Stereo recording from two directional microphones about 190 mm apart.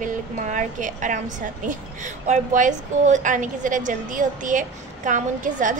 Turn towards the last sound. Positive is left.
turn(degrees=-40)  # may be behind; listen again after turning